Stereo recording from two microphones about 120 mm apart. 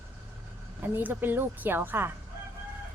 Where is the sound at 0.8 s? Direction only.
15° right (ahead or behind).